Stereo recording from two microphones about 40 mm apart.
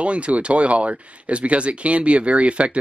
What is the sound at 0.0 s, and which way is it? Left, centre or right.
Speech, right.